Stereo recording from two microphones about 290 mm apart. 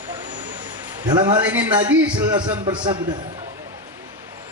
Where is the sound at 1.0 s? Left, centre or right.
Centre.